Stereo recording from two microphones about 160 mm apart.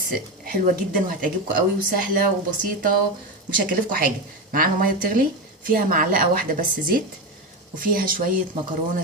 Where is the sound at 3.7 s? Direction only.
60° right (ahead or behind).